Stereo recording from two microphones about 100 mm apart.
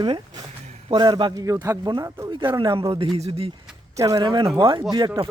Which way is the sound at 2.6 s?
55° right (ahead or behind).